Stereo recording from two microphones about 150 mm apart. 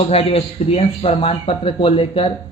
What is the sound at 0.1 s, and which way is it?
A man's voice, 40° left (ahead or behind).